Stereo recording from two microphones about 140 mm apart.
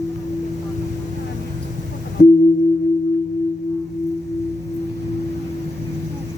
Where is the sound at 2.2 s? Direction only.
60° left (ahead or behind).